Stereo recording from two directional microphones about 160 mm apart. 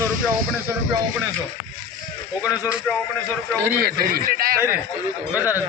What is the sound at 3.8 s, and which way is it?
Speech, 70° right (ahead or behind).